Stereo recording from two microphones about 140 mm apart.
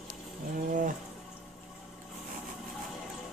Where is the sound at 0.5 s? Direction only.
70° right (ahead or behind).